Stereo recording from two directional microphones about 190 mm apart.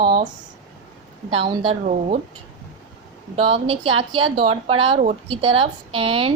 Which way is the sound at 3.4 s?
30° right (ahead or behind).